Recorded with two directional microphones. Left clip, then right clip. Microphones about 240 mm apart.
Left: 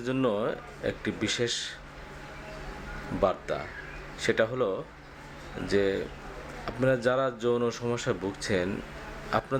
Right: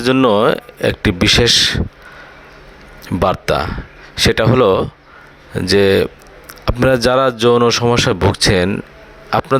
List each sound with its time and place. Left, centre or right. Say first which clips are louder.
0.0 s speech: right 16 dB; right
3.2 s speech: right 13 dB; right